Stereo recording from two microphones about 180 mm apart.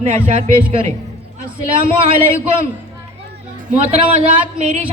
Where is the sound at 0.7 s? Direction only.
30° right (ahead or behind).